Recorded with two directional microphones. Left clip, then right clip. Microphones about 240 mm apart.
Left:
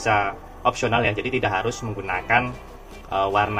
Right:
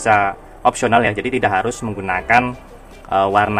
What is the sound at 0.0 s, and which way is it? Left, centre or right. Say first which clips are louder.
Speech: right 6 dB; right.